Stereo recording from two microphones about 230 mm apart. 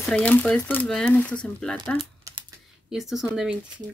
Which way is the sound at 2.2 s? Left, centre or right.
Right.